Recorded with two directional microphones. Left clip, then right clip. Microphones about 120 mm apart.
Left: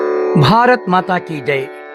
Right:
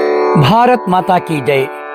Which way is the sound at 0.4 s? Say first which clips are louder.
Left 2 dB; 15° right (ahead or behind).